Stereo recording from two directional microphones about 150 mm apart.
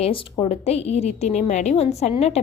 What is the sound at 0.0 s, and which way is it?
A woman's voice, 35° left (ahead or behind).